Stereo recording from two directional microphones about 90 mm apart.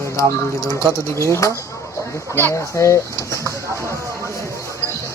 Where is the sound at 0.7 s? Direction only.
35° left (ahead or behind).